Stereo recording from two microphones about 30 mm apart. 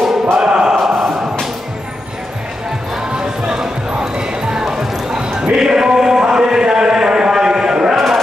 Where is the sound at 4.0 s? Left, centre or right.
Centre.